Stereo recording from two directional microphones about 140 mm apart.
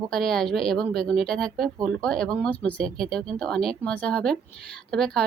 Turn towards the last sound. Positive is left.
turn(degrees=5)  # may be behind; listen again after turning